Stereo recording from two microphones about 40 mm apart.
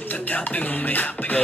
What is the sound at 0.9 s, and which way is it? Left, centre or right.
Music, left.